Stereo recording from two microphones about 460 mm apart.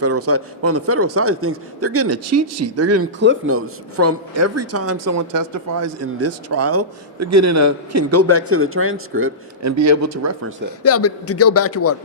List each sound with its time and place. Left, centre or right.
0.0 s speech: right
10.8 s a man's voice: left